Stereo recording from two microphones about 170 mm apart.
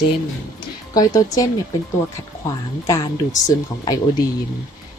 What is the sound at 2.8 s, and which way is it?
Speech, 20° left (ahead or behind).